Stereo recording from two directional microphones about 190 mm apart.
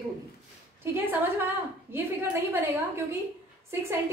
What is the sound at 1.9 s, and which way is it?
Speech, 10° right (ahead or behind).